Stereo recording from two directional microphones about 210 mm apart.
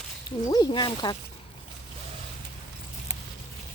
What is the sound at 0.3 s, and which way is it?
Speech, 20° left (ahead or behind).